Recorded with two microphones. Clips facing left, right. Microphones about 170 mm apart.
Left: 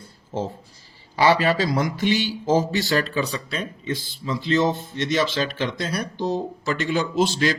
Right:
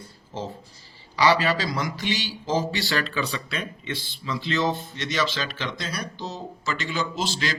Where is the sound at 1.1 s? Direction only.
50° left (ahead or behind).